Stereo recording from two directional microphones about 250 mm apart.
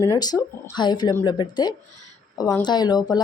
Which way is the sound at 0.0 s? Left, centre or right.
Centre.